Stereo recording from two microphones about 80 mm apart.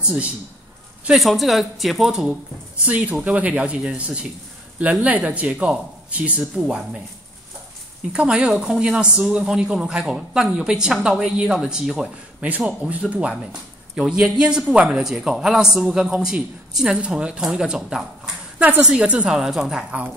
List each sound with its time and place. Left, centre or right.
0.0 s a man's voice: centre
1.1 s speech: centre
2.8 s a man's voice: centre
8.1 s a man's voice: centre